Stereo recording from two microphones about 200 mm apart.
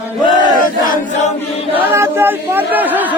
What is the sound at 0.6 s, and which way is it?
Crowd, 45° left (ahead or behind).